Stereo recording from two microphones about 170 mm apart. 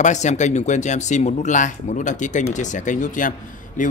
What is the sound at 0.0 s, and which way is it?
Speech, 45° left (ahead or behind).